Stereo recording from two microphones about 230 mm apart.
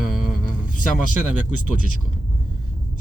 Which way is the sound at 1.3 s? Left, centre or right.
Left.